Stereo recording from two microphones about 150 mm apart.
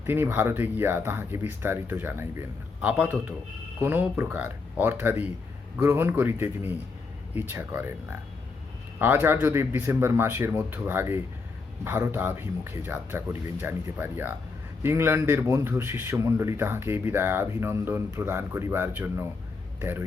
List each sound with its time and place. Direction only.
0.0 s a man's voice: 15° right (ahead or behind)
9.0 s a man's voice: 15° right (ahead or behind)